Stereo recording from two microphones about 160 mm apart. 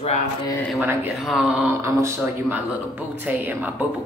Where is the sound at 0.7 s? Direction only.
10° right (ahead or behind).